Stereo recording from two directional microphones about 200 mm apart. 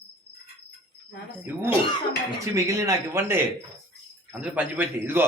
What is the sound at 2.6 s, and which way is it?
Speech, 15° right (ahead or behind).